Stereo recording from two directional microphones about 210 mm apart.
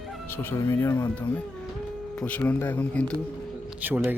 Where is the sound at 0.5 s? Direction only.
15° left (ahead or behind).